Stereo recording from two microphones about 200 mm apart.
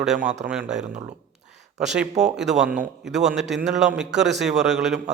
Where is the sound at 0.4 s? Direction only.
5° right (ahead or behind).